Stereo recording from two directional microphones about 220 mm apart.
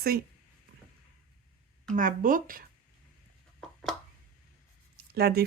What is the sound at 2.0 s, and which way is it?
Speech, 40° right (ahead or behind).